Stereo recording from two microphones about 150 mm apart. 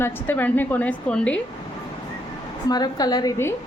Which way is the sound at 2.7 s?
25° left (ahead or behind).